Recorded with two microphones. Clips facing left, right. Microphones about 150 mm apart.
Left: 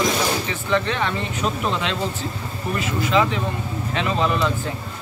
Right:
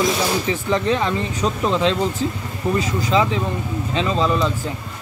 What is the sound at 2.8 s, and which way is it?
Speech, 35° right (ahead or behind).